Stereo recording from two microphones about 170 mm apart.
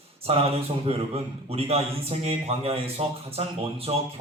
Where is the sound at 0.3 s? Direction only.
35° right (ahead or behind).